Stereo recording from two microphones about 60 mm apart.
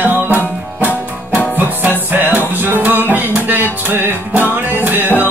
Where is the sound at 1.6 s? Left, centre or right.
Right.